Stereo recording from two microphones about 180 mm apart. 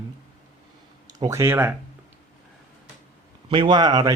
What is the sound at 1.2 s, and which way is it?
Speech, 15° right (ahead or behind).